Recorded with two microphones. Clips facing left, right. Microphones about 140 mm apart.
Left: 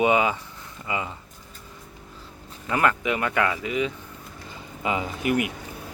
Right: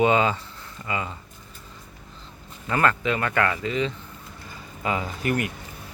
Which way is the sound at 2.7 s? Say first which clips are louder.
Even; 15° left (ahead or behind).